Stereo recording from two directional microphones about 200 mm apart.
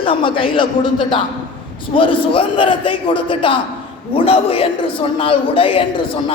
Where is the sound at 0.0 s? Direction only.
25° left (ahead or behind).